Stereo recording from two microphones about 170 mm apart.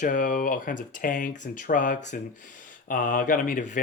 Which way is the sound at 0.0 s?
50° left (ahead or behind).